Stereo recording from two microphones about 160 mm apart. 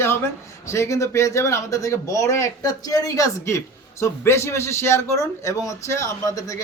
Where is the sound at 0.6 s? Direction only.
15° left (ahead or behind).